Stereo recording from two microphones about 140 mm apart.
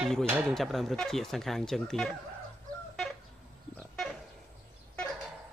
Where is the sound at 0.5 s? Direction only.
Centre (ahead or behind).